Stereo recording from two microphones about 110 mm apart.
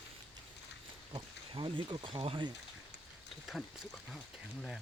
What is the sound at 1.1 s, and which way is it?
Speech, 50° right (ahead or behind).